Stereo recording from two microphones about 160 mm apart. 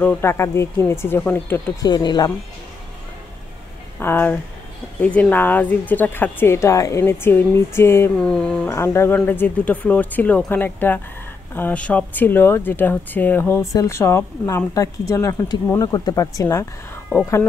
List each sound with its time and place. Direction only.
0.0 s speech: 10° left (ahead or behind)
1.9 s speech: 25° left (ahead or behind)
4.0 s speech: 15° left (ahead or behind)
8.2 s a sound: 5° left (ahead or behind)
8.6 s speech: 15° left (ahead or behind)